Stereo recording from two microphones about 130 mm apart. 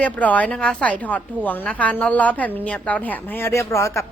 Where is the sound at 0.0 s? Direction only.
10° left (ahead or behind).